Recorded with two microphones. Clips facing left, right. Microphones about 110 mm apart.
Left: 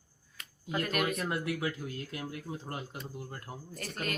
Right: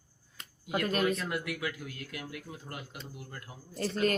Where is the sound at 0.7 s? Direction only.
25° right (ahead or behind).